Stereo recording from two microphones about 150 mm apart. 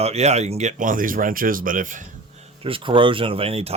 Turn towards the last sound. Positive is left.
turn(degrees=-40)  # may be behind; listen again after turning